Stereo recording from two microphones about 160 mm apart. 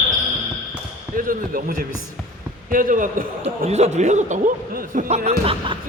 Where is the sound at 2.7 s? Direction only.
60° right (ahead or behind).